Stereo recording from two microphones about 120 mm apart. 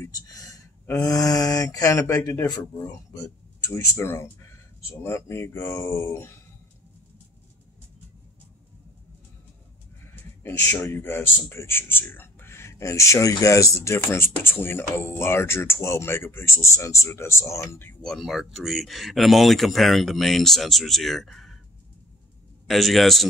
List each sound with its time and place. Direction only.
0.0 s speech: 30° left (ahead or behind)
10.4 s speech: 20° left (ahead or behind)
18.0 s speech: centre (ahead or behind)
22.7 s speech: centre (ahead or behind)